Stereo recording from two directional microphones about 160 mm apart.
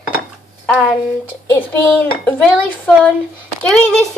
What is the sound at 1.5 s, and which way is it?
Speech, 10° left (ahead or behind).